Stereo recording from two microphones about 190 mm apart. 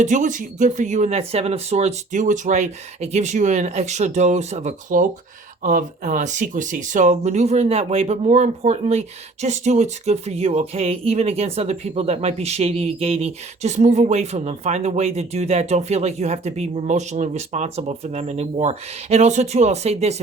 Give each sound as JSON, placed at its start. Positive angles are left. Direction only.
{"t": 0.0, "sound": "speech", "side_deg": -40}